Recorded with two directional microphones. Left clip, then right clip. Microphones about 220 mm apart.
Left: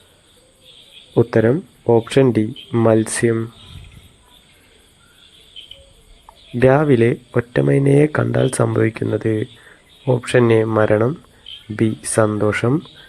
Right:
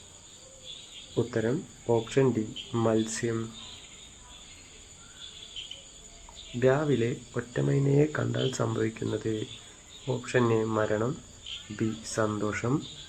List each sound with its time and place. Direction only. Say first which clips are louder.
1.1 s speech: left 14 dB; 40° left (ahead or behind)
6.6 s speech: left 12 dB; 40° left (ahead or behind)